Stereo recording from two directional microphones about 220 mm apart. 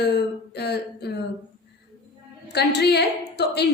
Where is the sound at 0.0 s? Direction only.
50° left (ahead or behind).